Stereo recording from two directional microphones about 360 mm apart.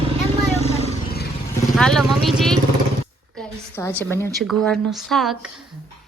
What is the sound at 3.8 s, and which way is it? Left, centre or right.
A woman's voice, centre.